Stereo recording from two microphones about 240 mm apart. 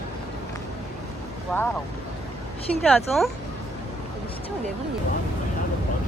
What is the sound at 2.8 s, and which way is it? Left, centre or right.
Speech, centre.